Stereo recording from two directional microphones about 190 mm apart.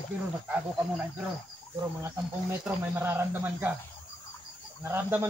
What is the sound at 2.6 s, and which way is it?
Speech, 10° right (ahead or behind).